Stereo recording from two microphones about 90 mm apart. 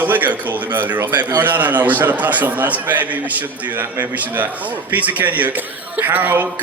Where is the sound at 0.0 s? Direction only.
20° right (ahead or behind).